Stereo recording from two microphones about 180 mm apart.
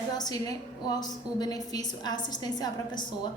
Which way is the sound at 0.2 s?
20° left (ahead or behind).